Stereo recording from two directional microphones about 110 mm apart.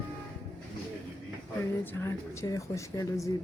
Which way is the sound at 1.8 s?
20° left (ahead or behind).